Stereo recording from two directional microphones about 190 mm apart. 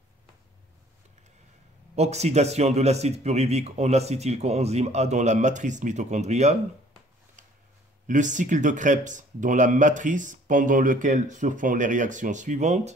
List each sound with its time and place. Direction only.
2.0 s speech: 35° right (ahead or behind)
8.1 s speech: 40° right (ahead or behind)